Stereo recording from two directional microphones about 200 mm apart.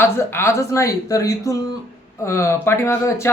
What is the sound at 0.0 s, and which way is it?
Speech, 10° left (ahead or behind).